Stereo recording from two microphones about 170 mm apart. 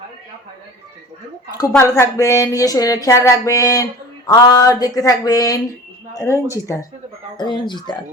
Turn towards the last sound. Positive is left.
turn(degrees=25)  # may be behind; listen again after turning